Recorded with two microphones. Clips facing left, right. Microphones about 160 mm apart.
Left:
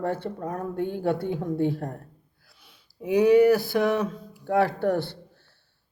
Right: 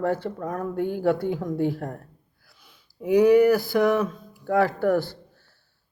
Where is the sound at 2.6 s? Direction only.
25° left (ahead or behind).